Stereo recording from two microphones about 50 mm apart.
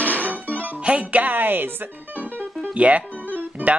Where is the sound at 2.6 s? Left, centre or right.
Right.